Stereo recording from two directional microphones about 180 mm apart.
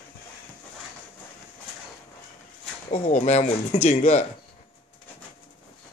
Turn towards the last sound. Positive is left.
turn(degrees=40)  # may be behind; listen again after turning